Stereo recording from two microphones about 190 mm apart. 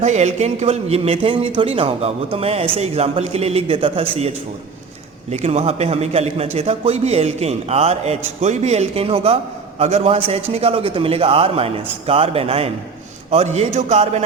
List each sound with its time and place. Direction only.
0.0 s a man's voice: 35° right (ahead or behind)
5.3 s a man's voice: 35° right (ahead or behind)